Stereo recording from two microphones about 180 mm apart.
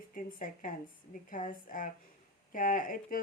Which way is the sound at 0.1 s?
45° left (ahead or behind).